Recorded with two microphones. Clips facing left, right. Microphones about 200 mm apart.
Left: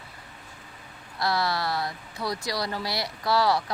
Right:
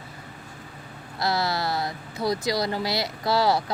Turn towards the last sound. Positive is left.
turn(degrees=-25)  # may be behind; listen again after turning